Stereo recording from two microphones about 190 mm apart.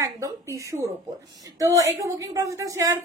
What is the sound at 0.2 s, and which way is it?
A woman's voice, 15° right (ahead or behind).